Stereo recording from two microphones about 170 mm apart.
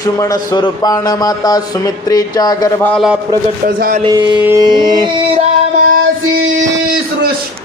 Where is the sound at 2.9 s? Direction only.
Centre (ahead or behind).